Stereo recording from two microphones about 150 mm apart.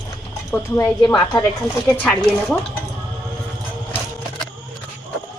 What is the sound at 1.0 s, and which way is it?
Speech, 25° left (ahead or behind).